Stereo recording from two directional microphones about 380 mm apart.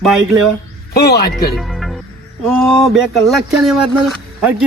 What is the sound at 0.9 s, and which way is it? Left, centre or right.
Speech, left.